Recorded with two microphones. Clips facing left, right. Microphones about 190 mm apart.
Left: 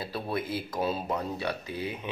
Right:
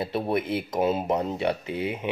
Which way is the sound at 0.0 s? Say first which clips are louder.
Right 6 dB; 25° right (ahead or behind).